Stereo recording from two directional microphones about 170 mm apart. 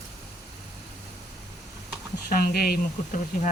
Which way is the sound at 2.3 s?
55° left (ahead or behind).